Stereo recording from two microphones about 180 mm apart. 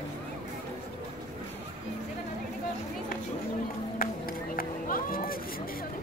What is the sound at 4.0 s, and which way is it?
Run, 55° left (ahead or behind).